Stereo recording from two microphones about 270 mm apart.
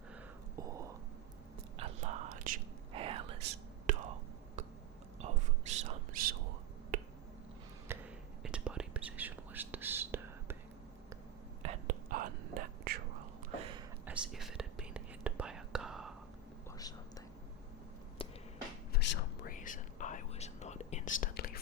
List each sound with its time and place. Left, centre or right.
0.7 s a sound: centre
1.8 s whispering: right
4.6 s a sound: right
5.2 s whispering: right
6.9 s finger snapping: right
7.9 s a sound: centre
8.4 s whispering: centre
11.6 s whispering: right
14.0 s whispering: centre
16.7 s whispering: centre
18.2 s a sound: centre
18.9 s whispering: left
19.5 s whispering: left